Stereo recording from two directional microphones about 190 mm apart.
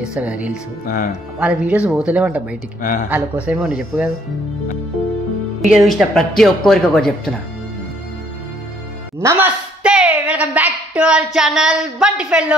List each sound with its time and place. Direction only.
0.0 s speech: 5° right (ahead or behind)
2.8 s speech: 45° left (ahead or behind)
3.1 s speech: 5° right (ahead or behind)
5.7 s speech: centre (ahead or behind)
9.2 s speech: 15° right (ahead or behind)